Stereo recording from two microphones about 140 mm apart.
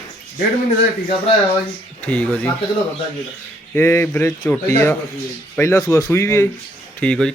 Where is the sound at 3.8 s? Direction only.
15° left (ahead or behind).